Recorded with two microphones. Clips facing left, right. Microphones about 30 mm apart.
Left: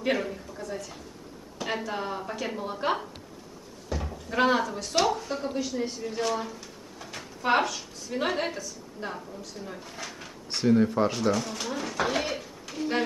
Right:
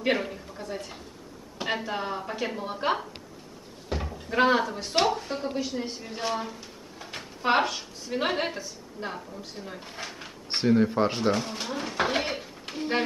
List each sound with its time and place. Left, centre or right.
0.0 s speech: right
0.5 s speech: right
1.8 s a woman's voice: centre
3.9 s cupboard open or close: right
4.3 s speech: centre
9.0 s a woman's voice: centre
9.4 s speech: right